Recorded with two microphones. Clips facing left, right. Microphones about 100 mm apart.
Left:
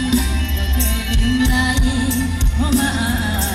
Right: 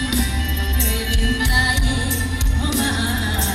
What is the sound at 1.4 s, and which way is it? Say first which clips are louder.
Music: left 4 dB; 30° left (ahead or behind).